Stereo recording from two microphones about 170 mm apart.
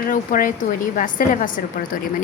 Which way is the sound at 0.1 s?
55° left (ahead or behind).